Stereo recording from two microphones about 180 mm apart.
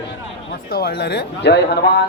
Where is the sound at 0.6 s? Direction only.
60° left (ahead or behind).